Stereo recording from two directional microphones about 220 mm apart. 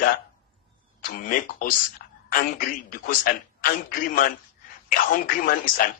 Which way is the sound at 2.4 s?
40° left (ahead or behind).